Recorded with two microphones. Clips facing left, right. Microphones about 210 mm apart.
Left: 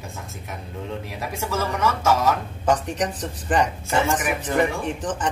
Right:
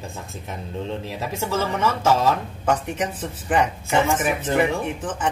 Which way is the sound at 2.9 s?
5° right (ahead or behind).